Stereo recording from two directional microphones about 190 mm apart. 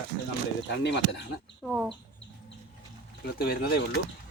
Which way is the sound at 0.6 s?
65° left (ahead or behind).